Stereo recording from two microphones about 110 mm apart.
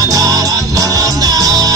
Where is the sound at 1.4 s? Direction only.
35° right (ahead or behind).